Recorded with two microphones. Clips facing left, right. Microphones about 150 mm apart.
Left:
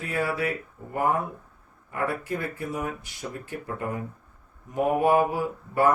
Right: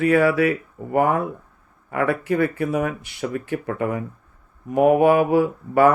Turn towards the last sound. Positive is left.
turn(degrees=-75)  # may be behind; listen again after turning